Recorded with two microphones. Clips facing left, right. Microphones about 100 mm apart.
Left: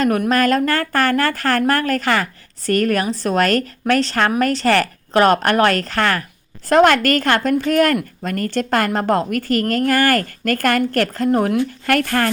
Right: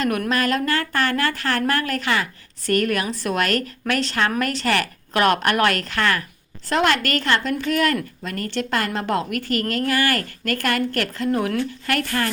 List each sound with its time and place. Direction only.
0.3 s a woman's voice: 40° left (ahead or behind)